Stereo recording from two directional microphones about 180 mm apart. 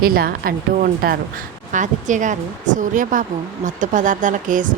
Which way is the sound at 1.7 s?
45° right (ahead or behind).